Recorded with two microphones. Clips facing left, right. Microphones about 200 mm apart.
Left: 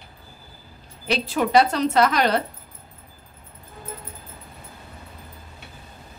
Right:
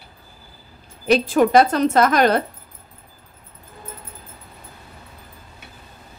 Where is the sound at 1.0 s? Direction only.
50° right (ahead or behind).